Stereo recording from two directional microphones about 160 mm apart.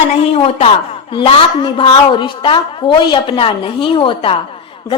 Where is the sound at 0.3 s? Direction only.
40° left (ahead or behind).